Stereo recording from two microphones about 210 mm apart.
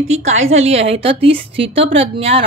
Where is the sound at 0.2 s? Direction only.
30° right (ahead or behind).